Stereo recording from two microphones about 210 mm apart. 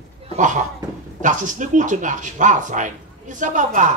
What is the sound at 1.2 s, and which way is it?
Speech, 35° right (ahead or behind).